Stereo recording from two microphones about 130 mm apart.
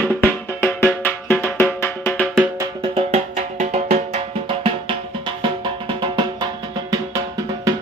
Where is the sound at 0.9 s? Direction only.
15° left (ahead or behind).